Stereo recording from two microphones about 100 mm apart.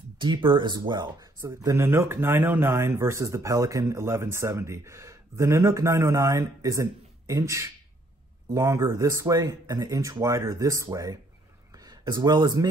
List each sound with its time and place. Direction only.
0.2 s speech: 55° right (ahead or behind)
1.4 s speech: 30° right (ahead or behind)
11.7 s a sound: 40° right (ahead or behind)